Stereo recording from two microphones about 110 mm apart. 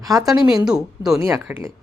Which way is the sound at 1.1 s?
25° right (ahead or behind).